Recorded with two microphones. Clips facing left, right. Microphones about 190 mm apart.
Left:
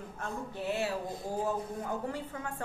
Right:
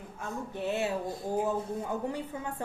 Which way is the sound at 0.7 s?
20° right (ahead or behind).